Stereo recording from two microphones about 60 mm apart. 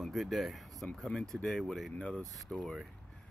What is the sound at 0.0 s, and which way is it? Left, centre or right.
Speech, centre.